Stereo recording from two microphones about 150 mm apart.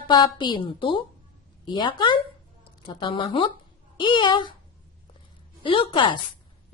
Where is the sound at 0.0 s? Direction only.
30° left (ahead or behind).